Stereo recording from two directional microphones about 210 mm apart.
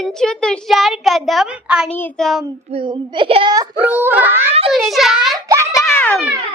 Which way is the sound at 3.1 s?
25° right (ahead or behind).